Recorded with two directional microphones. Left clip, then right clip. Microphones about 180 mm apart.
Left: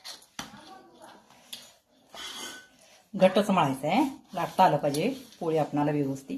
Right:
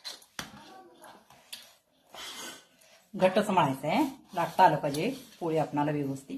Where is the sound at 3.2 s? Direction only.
25° left (ahead or behind).